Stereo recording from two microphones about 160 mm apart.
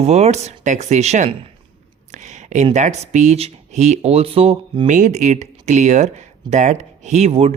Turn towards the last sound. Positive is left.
turn(degrees=-40)  # may be behind; listen again after turning